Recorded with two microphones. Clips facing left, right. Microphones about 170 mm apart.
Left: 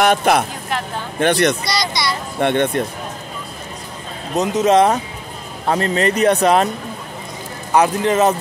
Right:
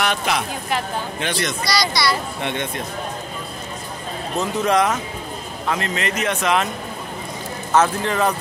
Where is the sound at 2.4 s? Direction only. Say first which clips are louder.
Left 9 dB; 55° left (ahead or behind).